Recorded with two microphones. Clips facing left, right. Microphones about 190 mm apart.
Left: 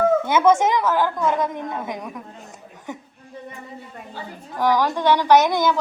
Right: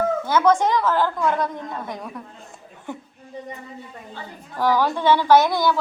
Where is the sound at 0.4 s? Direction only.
15° left (ahead or behind).